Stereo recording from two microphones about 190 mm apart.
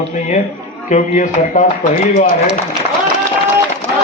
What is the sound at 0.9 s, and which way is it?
A man's voice, 40° left (ahead or behind).